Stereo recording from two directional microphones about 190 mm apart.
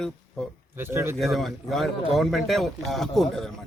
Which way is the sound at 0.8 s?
10° right (ahead or behind).